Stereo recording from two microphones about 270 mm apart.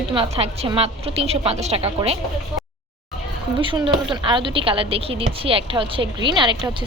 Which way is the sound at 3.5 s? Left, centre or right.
Centre.